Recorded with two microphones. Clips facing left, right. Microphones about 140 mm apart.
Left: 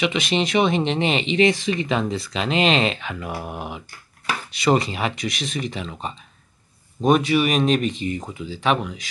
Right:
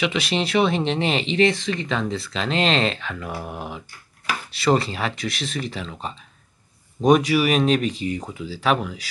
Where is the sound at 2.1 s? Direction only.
5° left (ahead or behind).